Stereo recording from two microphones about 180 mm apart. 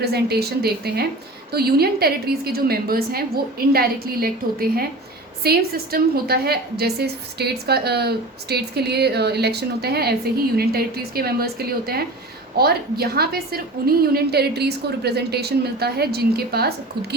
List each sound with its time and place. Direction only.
0.0 s a woman's voice: 60° right (ahead or behind)